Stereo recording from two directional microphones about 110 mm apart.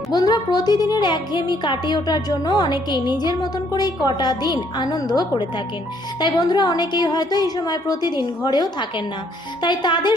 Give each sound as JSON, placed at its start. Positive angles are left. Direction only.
{"t": 0.1, "sound": "speech", "side_deg": 40}